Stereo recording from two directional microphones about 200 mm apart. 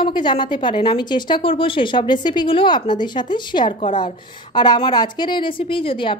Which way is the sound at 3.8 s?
40° left (ahead or behind).